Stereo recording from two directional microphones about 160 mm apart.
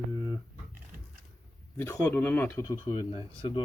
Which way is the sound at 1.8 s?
15° left (ahead or behind).